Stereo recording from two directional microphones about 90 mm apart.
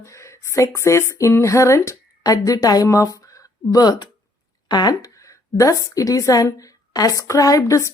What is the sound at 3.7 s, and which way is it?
A woman's voice, 45° left (ahead or behind).